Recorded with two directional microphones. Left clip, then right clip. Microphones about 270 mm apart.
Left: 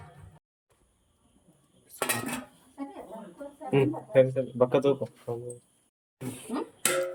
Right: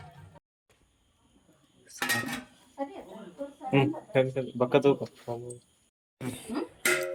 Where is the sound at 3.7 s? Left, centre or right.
Centre.